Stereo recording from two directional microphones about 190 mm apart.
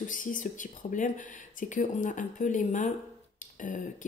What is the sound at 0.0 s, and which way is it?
Speech, 45° left (ahead or behind).